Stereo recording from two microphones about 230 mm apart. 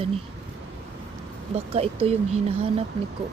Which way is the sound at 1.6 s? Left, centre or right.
Right.